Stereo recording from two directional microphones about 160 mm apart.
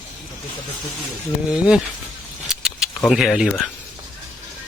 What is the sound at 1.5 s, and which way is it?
Speech, 5° right (ahead or behind).